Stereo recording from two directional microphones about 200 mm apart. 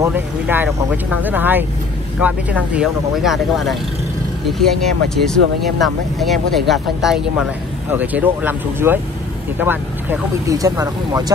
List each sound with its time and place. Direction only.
0.0 s speech: 10° right (ahead or behind)